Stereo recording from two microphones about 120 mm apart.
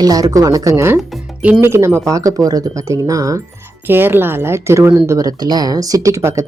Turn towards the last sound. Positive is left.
turn(degrees=-25)  # may be behind; listen again after turning